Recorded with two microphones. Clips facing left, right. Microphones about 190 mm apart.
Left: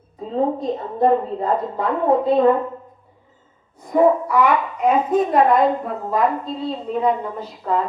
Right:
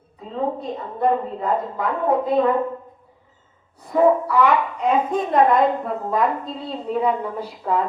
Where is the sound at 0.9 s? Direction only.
30° left (ahead or behind).